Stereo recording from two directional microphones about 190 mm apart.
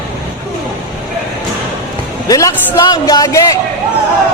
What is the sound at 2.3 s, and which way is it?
Speech, 15° left (ahead or behind).